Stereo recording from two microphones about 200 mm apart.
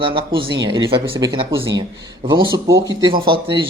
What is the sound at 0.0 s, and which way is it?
Speech, 25° right (ahead or behind).